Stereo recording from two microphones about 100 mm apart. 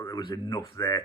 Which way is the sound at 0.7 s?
30° left (ahead or behind).